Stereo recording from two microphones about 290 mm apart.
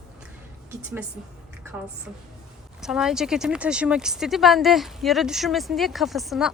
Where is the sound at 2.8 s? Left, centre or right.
Centre.